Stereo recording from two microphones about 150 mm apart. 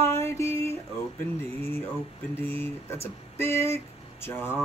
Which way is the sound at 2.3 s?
15° left (ahead or behind).